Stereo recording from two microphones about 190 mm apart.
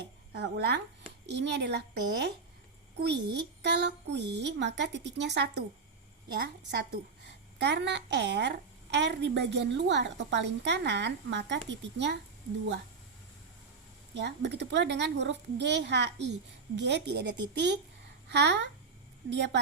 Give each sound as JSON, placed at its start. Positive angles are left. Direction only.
{"t": 0.3, "sound": "a woman's voice", "side_deg": -60}
{"t": 3.6, "sound": "a woman's voice", "side_deg": -65}
{"t": 14.1, "sound": "a woman's voice", "side_deg": -65}